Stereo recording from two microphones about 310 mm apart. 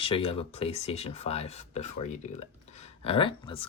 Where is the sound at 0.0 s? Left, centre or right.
Centre.